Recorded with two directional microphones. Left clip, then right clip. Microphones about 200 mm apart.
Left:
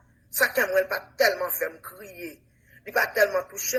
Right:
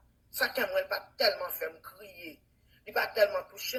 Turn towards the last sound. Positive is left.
turn(degrees=45)  # may be behind; listen again after turning